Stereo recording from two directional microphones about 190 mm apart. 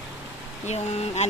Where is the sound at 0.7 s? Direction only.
35° left (ahead or behind).